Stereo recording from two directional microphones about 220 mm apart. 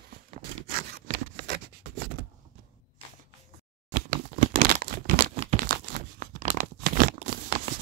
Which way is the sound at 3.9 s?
40° right (ahead or behind).